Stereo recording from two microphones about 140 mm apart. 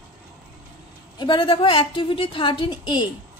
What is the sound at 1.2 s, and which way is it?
A woman's voice, 35° left (ahead or behind).